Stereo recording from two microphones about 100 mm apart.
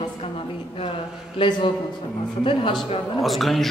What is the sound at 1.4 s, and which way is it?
Speech, 50° left (ahead or behind).